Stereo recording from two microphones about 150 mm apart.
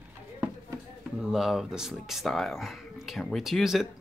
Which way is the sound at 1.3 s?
Centre (ahead or behind).